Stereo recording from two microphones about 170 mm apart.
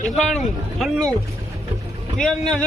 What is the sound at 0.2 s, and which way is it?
Speech, centre (ahead or behind).